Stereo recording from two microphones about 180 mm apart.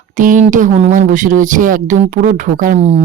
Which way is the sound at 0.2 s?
45° right (ahead or behind).